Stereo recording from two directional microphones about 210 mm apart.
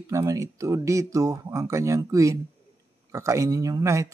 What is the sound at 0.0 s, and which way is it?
Speech, 15° right (ahead or behind).